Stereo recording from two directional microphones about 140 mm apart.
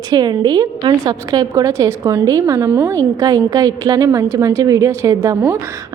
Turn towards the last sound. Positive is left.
turn(degrees=-20)  # may be behind; listen again after turning